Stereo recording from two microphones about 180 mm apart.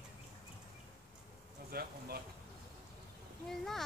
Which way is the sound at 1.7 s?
60° right (ahead or behind).